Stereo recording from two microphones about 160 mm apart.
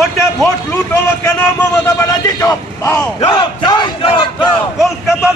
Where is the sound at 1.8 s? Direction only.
20° left (ahead or behind).